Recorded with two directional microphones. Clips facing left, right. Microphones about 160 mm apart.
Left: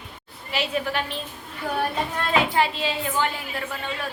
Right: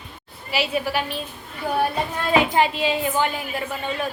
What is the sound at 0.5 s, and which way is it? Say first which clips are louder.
Speech: right 3 dB; 10° right (ahead or behind).